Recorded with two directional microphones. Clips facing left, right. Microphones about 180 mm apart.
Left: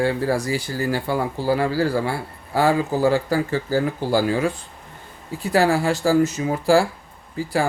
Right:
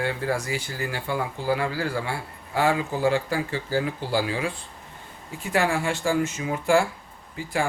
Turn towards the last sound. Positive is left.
turn(degrees=35)  # may be behind; listen again after turning